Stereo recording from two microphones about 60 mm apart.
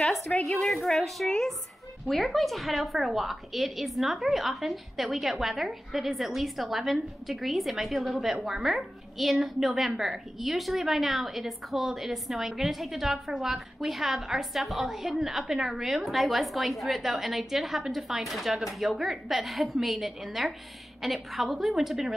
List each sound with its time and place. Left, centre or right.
0.0 s a woman's voice: centre